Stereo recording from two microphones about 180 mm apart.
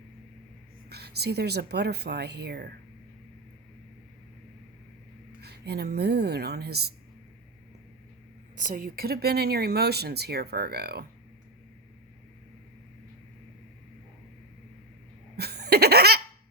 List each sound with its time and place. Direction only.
0.9 s speech: 60° right (ahead or behind)
5.4 s a woman's voice: 65° right (ahead or behind)
8.5 s speech: 50° right (ahead or behind)
15.4 s laughter: 65° right (ahead or behind)